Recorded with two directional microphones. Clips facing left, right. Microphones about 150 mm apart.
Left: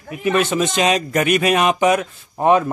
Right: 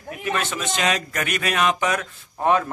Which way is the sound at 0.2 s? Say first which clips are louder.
Left 9 dB; 15° left (ahead or behind).